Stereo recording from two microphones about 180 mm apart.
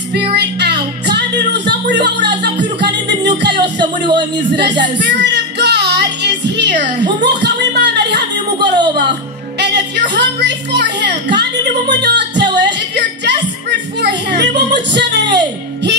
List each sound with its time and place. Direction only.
0.4 s music: 70° right (ahead or behind)
4.6 s music: 75° right (ahead or behind)
9.6 s a sound: 70° right (ahead or behind)
12.0 s music: 70° right (ahead or behind)
15.0 s speech: 75° right (ahead or behind)